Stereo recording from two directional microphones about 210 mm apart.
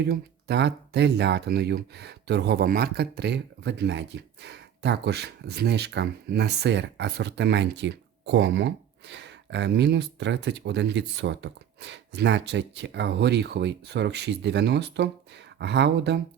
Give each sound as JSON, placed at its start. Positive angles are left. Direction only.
{"t": 0.0, "sound": "speech", "side_deg": -50}